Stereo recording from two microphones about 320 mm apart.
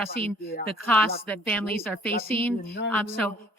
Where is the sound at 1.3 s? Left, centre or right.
Centre.